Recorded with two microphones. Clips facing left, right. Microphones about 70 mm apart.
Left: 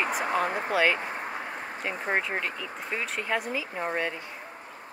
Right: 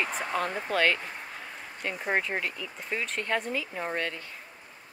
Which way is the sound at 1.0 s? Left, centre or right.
Left.